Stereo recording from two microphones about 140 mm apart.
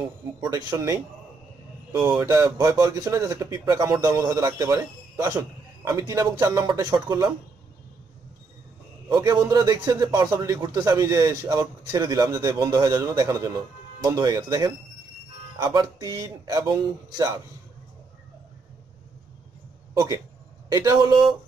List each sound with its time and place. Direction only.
0.4 s a man's voice: 25° right (ahead or behind)
2.0 s a man's voice: 15° right (ahead or behind)
9.1 s a man's voice: 25° right (ahead or behind)
19.9 s a man's voice: 25° right (ahead or behind)